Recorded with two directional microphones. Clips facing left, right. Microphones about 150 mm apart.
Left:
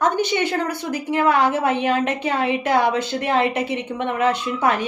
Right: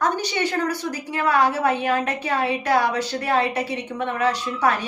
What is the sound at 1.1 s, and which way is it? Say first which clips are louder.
A woman's voice: left 3 dB; 25° left (ahead or behind).